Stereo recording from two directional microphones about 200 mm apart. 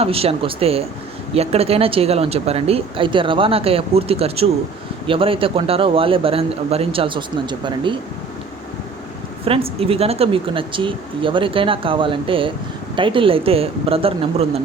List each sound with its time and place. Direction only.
0.0 s speech: 30° right (ahead or behind)
9.4 s speech: 30° right (ahead or behind)